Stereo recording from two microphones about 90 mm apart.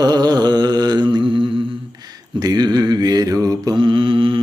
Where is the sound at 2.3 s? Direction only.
50° right (ahead or behind).